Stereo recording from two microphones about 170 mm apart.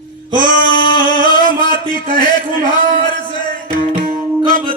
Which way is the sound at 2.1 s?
50° right (ahead or behind).